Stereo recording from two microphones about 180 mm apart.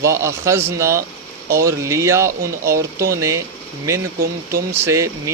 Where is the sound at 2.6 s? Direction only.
55° right (ahead or behind).